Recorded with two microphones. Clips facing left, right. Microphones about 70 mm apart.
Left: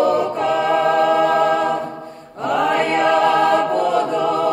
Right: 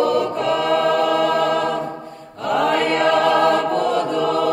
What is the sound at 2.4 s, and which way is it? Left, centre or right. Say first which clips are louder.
Chant: even; centre.